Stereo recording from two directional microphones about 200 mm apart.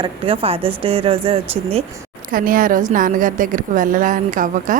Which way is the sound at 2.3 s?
45° right (ahead or behind).